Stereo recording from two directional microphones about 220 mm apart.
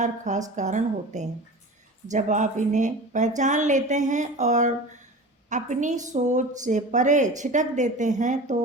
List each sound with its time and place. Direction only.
0.0 s speech: 35° right (ahead or behind)